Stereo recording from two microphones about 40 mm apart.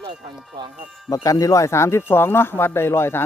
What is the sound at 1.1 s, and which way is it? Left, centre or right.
Speech, centre.